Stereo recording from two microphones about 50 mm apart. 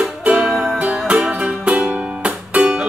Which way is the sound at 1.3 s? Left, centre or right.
Right.